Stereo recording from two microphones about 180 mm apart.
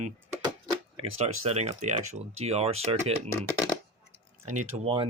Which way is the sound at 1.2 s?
40° right (ahead or behind).